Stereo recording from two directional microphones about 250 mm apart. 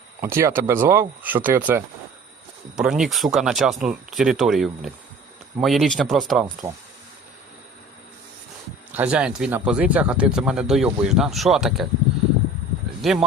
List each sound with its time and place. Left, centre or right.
0.2 s speech: centre
8.9 s speech: centre
13.0 s speech: centre